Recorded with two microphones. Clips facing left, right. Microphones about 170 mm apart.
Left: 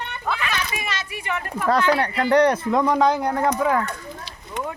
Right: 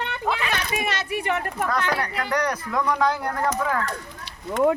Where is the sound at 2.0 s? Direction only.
30° left (ahead or behind).